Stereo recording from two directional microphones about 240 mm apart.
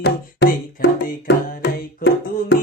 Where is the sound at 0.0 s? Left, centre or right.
Left.